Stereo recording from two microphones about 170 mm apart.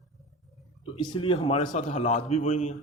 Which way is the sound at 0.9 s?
30° left (ahead or behind).